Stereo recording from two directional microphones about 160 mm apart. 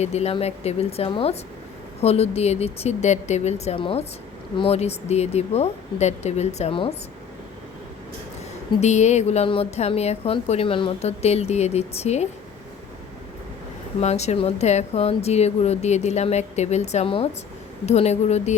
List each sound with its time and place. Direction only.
0.0 s a woman's voice: 40° left (ahead or behind)
8.8 s a woman's voice: 45° left (ahead or behind)
14.0 s speech: 45° left (ahead or behind)